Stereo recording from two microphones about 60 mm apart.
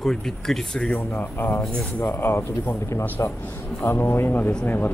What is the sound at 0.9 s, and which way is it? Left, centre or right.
Speech, left.